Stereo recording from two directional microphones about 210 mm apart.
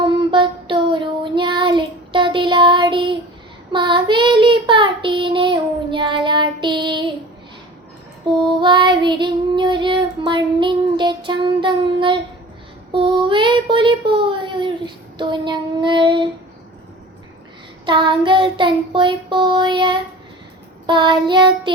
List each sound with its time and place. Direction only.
0.0 s child singing: 25° right (ahead or behind)
8.4 s child singing: 20° right (ahead or behind)
17.8 s child singing: 20° right (ahead or behind)